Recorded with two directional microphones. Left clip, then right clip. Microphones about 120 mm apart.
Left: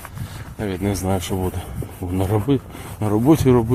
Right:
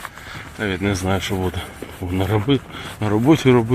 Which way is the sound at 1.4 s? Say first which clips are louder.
Right 2 dB; 10° left (ahead or behind).